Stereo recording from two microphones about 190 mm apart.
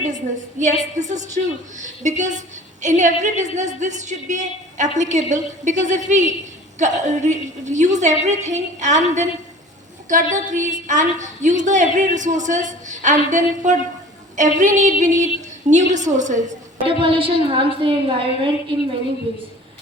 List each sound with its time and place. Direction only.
0.6 s a woman's voice: 40° right (ahead or behind)
16.8 s a woman's voice: 30° right (ahead or behind)